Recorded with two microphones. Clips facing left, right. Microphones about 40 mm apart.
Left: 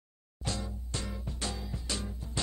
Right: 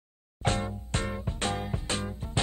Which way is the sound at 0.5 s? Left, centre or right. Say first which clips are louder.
Right 8 dB; right.